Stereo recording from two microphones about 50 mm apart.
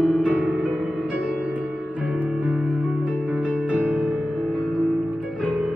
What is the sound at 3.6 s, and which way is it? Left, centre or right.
Music, right.